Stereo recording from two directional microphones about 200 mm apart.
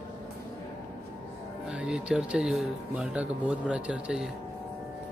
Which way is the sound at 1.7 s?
5° right (ahead or behind).